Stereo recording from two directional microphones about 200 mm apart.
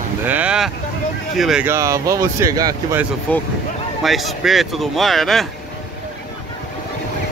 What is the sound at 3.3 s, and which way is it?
Speech, 5° left (ahead or behind).